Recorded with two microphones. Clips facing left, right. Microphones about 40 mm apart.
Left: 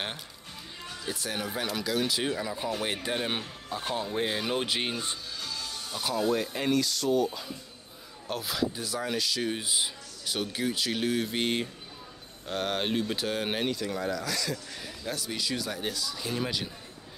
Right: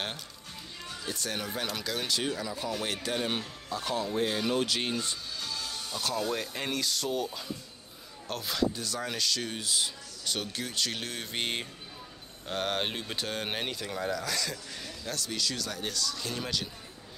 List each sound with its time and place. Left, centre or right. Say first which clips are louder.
0.8 s speech: left 1 dB; centre
5.4 s music: even; centre
5.9 s speech: left 4 dB; centre
8.3 s speech: even; centre
15.0 s speech: left 1 dB; centre